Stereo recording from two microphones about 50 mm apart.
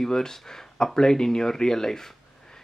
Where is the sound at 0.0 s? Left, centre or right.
Centre.